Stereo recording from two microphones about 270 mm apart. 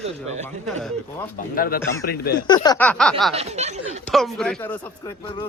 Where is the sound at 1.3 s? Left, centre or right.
Left.